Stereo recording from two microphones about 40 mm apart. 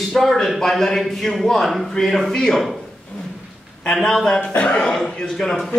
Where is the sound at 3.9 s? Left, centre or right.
Centre.